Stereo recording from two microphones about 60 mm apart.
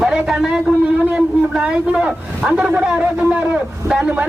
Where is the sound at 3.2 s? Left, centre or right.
Right.